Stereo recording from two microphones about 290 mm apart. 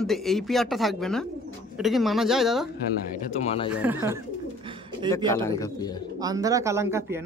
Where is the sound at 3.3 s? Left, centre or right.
Left.